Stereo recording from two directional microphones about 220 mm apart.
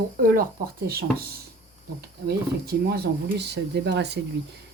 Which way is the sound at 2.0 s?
45° right (ahead or behind).